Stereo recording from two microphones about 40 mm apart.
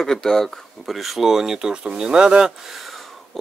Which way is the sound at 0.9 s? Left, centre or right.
Centre.